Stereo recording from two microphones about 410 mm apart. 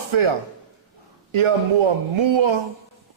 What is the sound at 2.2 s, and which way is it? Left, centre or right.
Speech, right.